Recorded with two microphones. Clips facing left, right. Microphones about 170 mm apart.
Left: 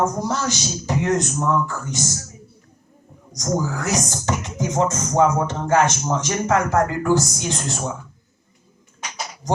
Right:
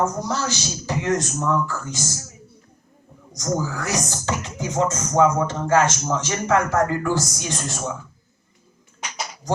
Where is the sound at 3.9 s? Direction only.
15° left (ahead or behind).